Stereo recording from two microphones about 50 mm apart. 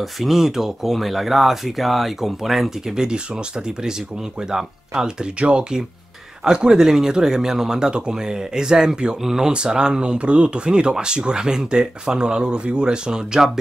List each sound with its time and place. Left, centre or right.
0.0 s speech: centre
4.5 s speech: centre